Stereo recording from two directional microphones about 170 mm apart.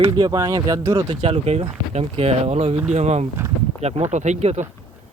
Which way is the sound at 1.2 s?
40° right (ahead or behind).